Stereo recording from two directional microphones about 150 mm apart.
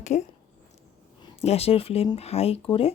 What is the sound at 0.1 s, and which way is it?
Speech, 50° left (ahead or behind).